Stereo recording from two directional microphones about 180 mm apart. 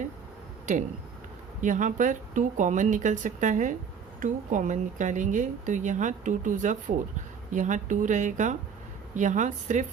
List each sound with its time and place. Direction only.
0.6 s speech: 40° right (ahead or behind)